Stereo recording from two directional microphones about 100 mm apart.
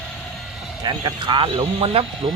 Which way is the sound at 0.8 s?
45° right (ahead or behind).